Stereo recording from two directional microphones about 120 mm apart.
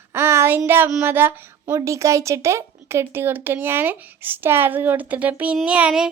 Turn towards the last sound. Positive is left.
turn(degrees=-10)  # may be behind; listen again after turning